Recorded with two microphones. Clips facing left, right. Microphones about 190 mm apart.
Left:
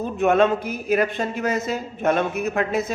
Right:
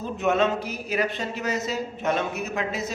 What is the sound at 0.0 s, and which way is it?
Speech, 55° left (ahead or behind).